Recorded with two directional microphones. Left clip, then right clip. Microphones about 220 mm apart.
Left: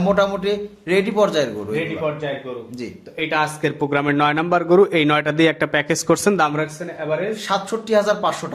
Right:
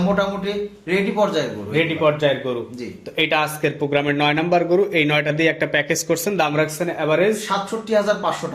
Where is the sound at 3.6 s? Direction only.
25° left (ahead or behind).